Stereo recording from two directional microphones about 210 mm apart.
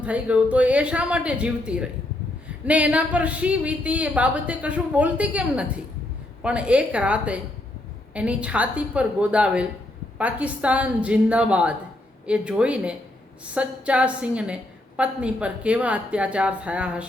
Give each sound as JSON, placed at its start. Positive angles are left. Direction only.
{"t": 0.0, "sound": "a woman's voice", "side_deg": -5}